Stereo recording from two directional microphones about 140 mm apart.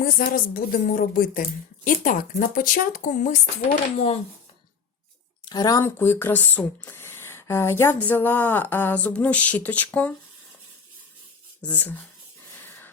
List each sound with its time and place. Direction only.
0.0 s a woman's voice: 80° left; by 3.3 s 60° left (ahead or behind)
3.9 s speech: 50° left (ahead or behind)
5.5 s speech: 30° left (ahead or behind); by 10.2 s 10° left (ahead or behind)
11.6 s speech: 10° left (ahead or behind)
12.5 s a sound: 15° left (ahead or behind)